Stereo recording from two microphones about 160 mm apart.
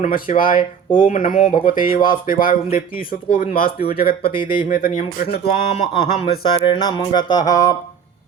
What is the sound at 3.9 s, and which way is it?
Speech, 70° left (ahead or behind).